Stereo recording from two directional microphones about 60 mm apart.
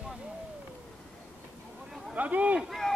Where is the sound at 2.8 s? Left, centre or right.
Centre.